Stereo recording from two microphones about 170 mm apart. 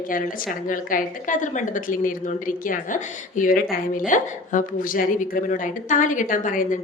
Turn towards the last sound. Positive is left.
turn(degrees=50)  # may be behind; listen again after turning